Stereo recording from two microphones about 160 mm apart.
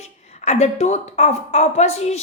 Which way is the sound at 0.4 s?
45° left (ahead or behind).